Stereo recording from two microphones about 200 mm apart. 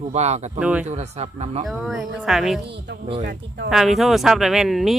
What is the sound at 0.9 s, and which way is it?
Speech, 35° right (ahead or behind).